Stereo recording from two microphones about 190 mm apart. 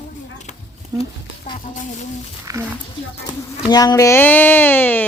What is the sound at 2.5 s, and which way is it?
Speech, 15° right (ahead or behind).